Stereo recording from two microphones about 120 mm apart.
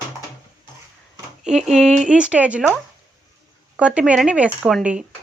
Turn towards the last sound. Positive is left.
turn(degrees=-10)  # may be behind; listen again after turning